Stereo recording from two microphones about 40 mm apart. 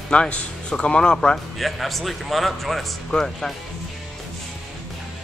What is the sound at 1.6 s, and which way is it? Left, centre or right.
Speech, centre.